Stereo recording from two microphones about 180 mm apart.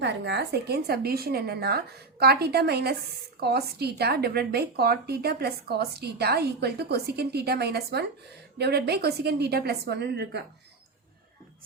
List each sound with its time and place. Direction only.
0.0 s a woman's voice: 70° right (ahead or behind)